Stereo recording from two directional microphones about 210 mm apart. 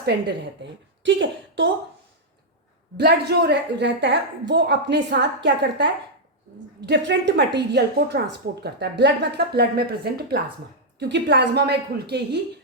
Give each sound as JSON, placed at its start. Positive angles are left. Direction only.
{"t": 0.0, "sound": "a woman's voice", "side_deg": -55}
{"t": 3.0, "sound": "a woman's voice", "side_deg": -50}